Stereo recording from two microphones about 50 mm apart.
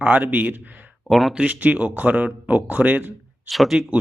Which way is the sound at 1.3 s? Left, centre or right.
Centre.